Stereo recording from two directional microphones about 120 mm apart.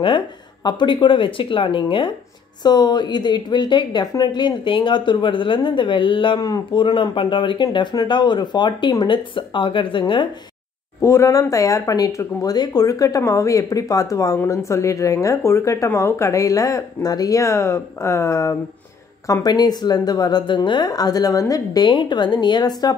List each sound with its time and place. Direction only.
0.7 s a woman's voice: 40° left (ahead or behind)
11.0 s a woman's voice: 25° left (ahead or behind)